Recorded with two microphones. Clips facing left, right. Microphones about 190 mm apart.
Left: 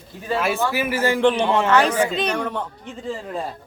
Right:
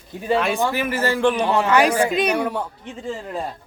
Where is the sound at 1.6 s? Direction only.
10° right (ahead or behind).